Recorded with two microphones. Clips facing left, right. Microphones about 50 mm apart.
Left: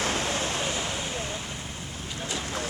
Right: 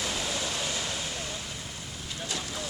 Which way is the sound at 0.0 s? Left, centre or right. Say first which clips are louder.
Left 4 dB; left.